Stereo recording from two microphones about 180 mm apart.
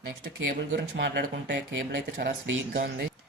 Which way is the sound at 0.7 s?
65° right (ahead or behind).